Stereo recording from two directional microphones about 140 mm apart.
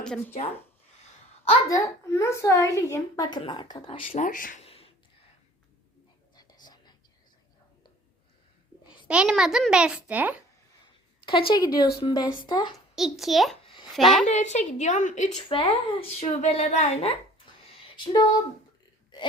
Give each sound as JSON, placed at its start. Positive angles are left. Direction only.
{"t": 0.0, "sound": "speech", "side_deg": 5}
{"t": 1.7, "sound": "a woman's voice", "side_deg": 20}
{"t": 3.8, "sound": "speech", "side_deg": 45}
{"t": 4.2, "sound": "speech", "side_deg": 75}
{"t": 4.6, "sound": "a sound", "side_deg": 45}
{"t": 6.3, "sound": "whispering", "side_deg": 30}
{"t": 9.0, "sound": "a child's voice", "side_deg": -5}
{"t": 11.3, "sound": "speech", "side_deg": 35}
{"t": 13.0, "sound": "a child's voice", "side_deg": 0}
{"t": 14.3, "sound": "a woman's voice", "side_deg": 55}
{"t": 15.4, "sound": "speech", "side_deg": 40}
{"t": 17.9, "sound": "speech", "side_deg": 30}